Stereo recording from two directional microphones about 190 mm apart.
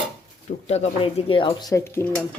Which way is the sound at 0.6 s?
35° left (ahead or behind).